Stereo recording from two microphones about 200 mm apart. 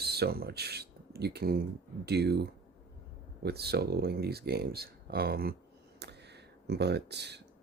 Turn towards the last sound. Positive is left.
turn(degrees=-55)  # may be behind; listen again after turning